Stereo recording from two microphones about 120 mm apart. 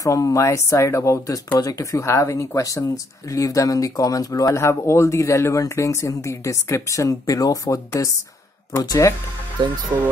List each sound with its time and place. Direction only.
0.0 s speech: 30° left (ahead or behind)
9.6 s speech: 40° right (ahead or behind)